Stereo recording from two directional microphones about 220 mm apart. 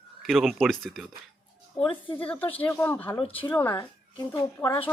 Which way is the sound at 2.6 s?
10° left (ahead or behind).